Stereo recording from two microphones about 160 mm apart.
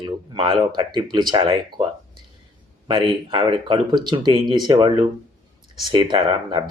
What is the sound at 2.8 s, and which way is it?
Speech, 30° right (ahead or behind).